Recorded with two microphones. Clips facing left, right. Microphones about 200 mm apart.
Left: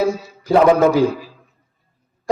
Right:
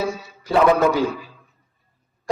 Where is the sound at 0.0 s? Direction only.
40° left (ahead or behind).